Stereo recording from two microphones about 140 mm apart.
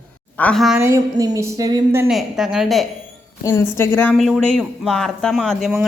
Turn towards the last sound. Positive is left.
turn(degrees=0)  # may be behind; listen again after turning